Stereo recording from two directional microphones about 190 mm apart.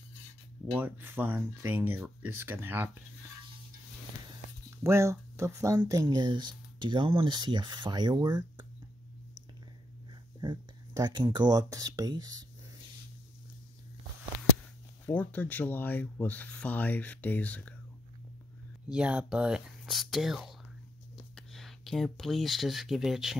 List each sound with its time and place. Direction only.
0.7 s speech: 10° right (ahead or behind)
4.6 s speech: 15° right (ahead or behind)
10.4 s speech: 20° right (ahead or behind)
15.0 s speech: 10° left (ahead or behind)
18.9 s speech: 5° right (ahead or behind)